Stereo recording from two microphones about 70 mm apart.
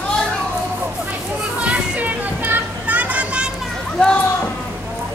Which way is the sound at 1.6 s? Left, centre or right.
Centre.